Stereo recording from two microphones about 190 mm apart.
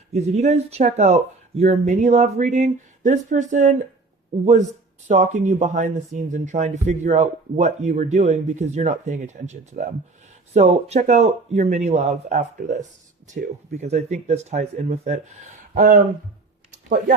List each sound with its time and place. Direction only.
0.1 s speech: 35° right (ahead or behind)
5.0 s speech: 40° right (ahead or behind)